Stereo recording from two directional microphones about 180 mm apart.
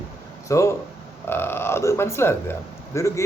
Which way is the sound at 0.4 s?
15° left (ahead or behind).